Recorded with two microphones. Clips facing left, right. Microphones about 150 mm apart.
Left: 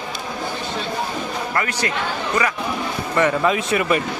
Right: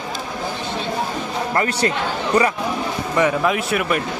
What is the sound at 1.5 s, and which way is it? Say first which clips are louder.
Speech: right 4 dB; 30° right (ahead or behind).